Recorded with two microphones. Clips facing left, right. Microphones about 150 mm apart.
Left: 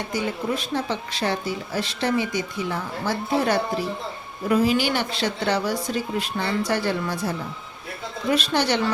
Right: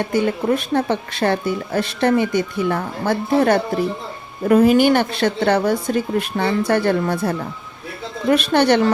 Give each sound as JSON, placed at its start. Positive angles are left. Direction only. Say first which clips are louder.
{"t": 0.0, "sound": "speech", "louder": "right 8 dB", "side_deg": -55}